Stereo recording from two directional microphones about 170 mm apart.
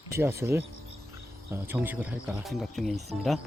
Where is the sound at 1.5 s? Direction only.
15° right (ahead or behind).